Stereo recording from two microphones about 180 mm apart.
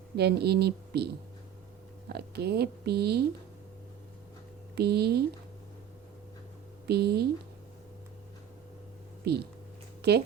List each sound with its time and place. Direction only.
0.2 s speech: 65° right (ahead or behind)
4.7 s speech: 65° right (ahead or behind)
6.8 s speech: 65° right (ahead or behind)
9.2 s speech: 65° right (ahead or behind)